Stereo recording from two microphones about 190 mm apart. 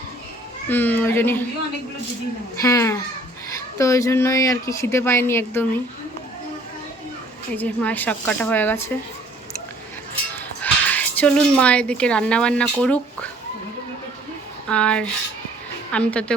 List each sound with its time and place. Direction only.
0.7 s speech: 10° left (ahead or behind)
2.6 s speech: 15° left (ahead or behind)
7.5 s speech: 10° left (ahead or behind)
10.3 s speech: 10° left (ahead or behind)
14.7 s speech: 5° left (ahead or behind)